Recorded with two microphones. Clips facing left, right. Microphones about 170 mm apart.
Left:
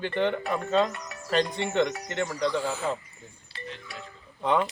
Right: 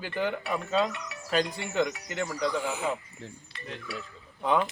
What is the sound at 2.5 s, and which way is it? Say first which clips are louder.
Speech: left 1 dB; 15° right (ahead or behind).